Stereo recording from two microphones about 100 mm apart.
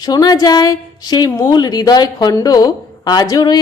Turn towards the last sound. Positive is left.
turn(degrees=40)  # may be behind; listen again after turning